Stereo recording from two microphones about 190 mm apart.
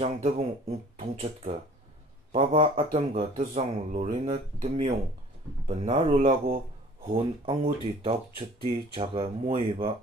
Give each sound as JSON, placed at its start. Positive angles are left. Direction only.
{"t": 0.0, "sound": "speech", "side_deg": -35}
{"t": 2.7, "sound": "speech", "side_deg": -30}